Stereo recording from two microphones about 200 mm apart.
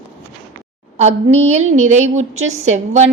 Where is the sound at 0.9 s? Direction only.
30° right (ahead or behind).